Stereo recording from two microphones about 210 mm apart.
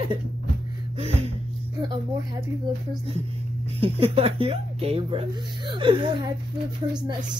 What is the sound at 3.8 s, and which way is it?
Speech, 25° right (ahead or behind).